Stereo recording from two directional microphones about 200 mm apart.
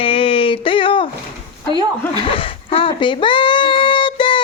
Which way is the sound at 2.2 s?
25° left (ahead or behind).